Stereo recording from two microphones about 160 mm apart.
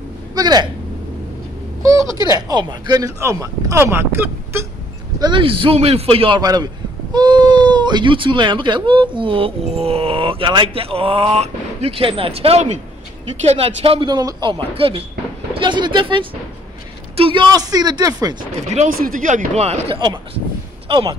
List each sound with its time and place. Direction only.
0.3 s speech: 25° right (ahead or behind)
1.8 s speech: 20° right (ahead or behind)
2.0 s speech: 25° left (ahead or behind)
2.3 s speech: 25° right (ahead or behind)
5.2 s a man's voice: 30° right (ahead or behind)
18.4 s speech: 50° right (ahead or behind)
20.9 s a man's voice: 30° right (ahead or behind)